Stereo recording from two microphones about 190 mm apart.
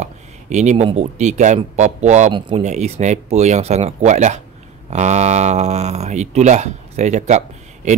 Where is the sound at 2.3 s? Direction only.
25° right (ahead or behind).